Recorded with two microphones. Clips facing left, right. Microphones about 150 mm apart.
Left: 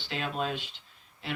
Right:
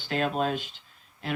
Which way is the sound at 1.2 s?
45° right (ahead or behind).